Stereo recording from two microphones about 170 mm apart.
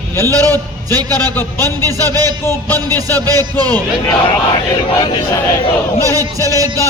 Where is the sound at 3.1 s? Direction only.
20° right (ahead or behind).